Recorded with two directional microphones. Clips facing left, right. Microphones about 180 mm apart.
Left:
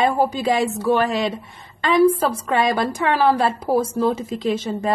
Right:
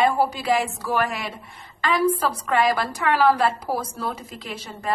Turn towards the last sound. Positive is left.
turn(degrees=25)  # may be behind; listen again after turning